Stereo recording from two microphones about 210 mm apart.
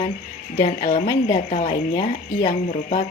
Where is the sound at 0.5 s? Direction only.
30° left (ahead or behind).